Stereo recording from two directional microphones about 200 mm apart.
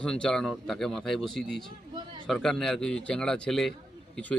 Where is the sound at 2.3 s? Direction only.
Centre (ahead or behind).